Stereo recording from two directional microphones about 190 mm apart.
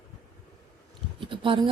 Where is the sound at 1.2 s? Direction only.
25° right (ahead or behind).